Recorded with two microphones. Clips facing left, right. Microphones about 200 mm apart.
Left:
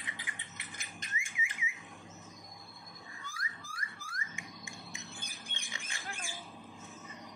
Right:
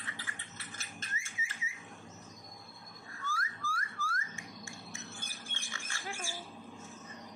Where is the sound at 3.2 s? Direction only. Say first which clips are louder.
Right 9 dB; 15° left (ahead or behind).